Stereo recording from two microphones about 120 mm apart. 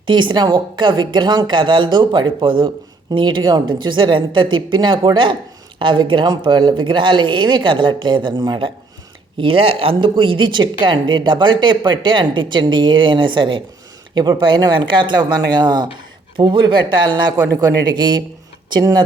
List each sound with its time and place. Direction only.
0.0 s a woman's voice: 40° right (ahead or behind)